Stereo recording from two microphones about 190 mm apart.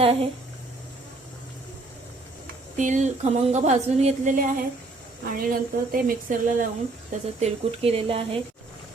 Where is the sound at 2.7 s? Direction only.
40° right (ahead or behind).